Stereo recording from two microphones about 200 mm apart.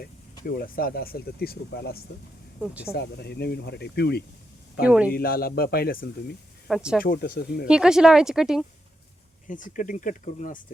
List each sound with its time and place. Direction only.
0.4 s speech: 45° left (ahead or behind)
2.6 s speech: 5° right (ahead or behind)
2.9 s speech: 55° left (ahead or behind)
4.9 s speech: 5° right (ahead or behind)
5.1 s speech: 50° left (ahead or behind)
6.7 s speech: centre (ahead or behind)
7.0 s speech: 45° left (ahead or behind)
7.7 s speech: 5° right (ahead or behind)
9.5 s speech: 40° left (ahead or behind)